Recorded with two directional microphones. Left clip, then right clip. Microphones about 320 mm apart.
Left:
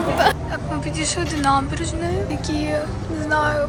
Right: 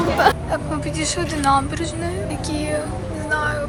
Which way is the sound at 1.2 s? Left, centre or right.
Centre.